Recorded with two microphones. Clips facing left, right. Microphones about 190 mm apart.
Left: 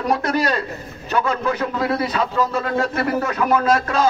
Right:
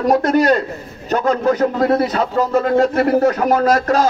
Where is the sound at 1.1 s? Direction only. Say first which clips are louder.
Right 5 dB; 40° right (ahead or behind).